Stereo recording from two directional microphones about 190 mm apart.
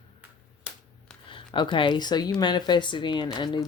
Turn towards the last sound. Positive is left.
turn(degrees=25)  # may be behind; listen again after turning